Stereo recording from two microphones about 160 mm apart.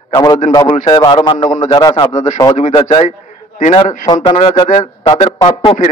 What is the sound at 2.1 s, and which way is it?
Speech, 50° left (ahead or behind).